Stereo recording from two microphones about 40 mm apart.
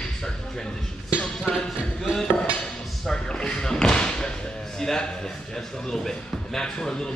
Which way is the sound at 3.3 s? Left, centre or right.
Centre.